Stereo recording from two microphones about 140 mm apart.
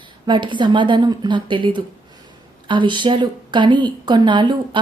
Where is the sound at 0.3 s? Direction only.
35° right (ahead or behind).